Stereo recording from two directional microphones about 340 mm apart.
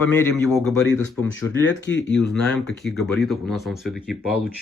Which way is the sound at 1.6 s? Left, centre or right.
Left.